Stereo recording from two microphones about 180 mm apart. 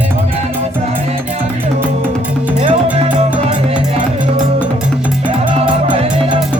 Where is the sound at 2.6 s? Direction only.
35° right (ahead or behind).